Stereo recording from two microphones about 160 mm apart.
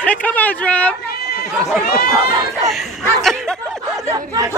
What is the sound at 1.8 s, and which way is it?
Speech, 70° left (ahead or behind).